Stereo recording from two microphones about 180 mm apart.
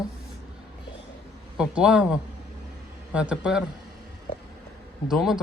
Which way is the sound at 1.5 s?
5° right (ahead or behind).